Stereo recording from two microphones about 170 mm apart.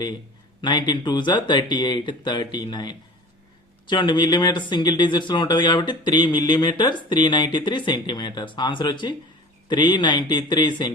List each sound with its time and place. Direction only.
0.6 s speech: 25° left (ahead or behind)